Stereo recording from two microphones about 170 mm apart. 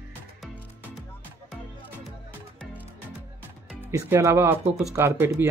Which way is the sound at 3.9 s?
15° right (ahead or behind).